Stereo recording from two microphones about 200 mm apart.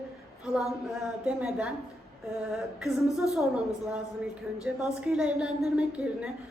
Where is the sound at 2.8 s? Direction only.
Centre (ahead or behind).